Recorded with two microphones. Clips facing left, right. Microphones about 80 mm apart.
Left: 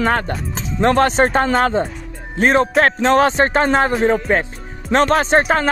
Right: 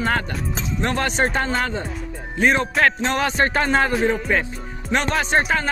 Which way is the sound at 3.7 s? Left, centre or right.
Left.